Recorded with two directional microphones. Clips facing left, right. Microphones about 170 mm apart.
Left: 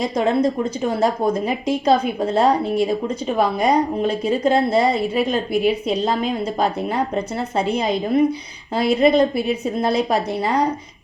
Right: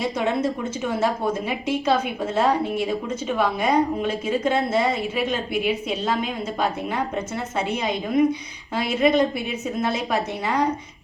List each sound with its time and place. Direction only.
0.0 s a woman's voice: 35° left (ahead or behind)